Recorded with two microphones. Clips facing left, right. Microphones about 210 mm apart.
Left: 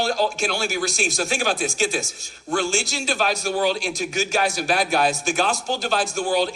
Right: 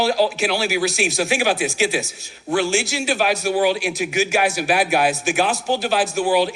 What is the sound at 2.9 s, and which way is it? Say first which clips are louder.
A man's voice: right 4 dB; 10° right (ahead or behind).